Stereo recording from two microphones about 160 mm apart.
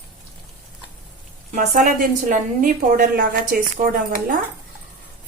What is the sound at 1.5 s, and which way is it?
A woman's voice, 55° right (ahead or behind).